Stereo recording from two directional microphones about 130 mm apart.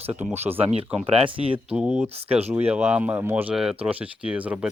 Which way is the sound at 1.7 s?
5° right (ahead or behind).